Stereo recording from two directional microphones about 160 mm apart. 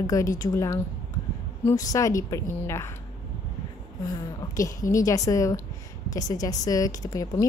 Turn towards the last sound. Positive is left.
turn(degrees=20)  # may be behind; listen again after turning